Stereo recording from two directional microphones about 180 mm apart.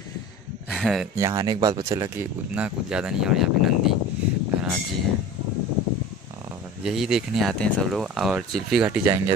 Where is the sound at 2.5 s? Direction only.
5° right (ahead or behind).